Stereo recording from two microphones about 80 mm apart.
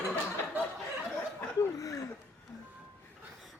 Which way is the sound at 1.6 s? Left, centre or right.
Left.